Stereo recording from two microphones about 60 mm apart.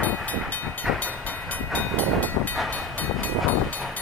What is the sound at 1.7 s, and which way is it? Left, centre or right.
Train, left.